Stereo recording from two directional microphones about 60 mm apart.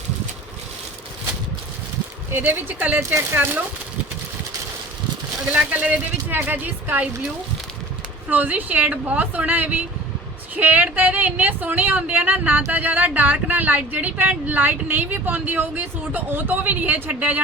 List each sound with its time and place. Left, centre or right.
2.3 s speech: right
5.5 s speech: right
8.3 s speech: right